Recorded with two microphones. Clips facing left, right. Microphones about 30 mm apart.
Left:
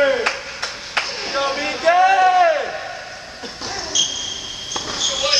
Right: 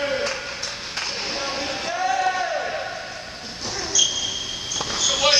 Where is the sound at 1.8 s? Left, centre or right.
Left.